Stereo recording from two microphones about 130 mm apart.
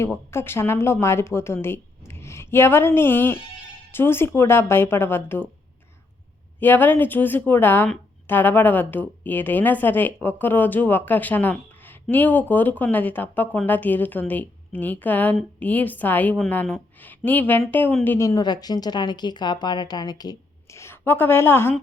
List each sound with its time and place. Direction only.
0.0 s a woman's voice: 20° left (ahead or behind)
6.6 s a woman's voice: 15° left (ahead or behind); by 20.3 s 30° left (ahead or behind)
20.7 s a woman's voice: 20° left (ahead or behind)